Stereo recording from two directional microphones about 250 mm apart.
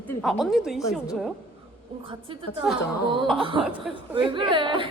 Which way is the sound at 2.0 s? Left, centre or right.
Right.